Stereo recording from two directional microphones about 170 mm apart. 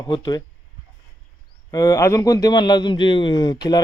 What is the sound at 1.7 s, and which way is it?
Speech, 20° left (ahead or behind).